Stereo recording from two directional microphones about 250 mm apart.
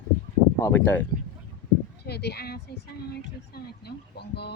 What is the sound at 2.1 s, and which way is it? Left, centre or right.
Speech, left.